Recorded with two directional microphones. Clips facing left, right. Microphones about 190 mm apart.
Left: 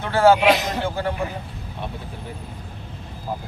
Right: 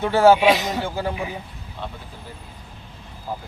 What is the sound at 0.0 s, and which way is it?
Speech, 15° right (ahead or behind).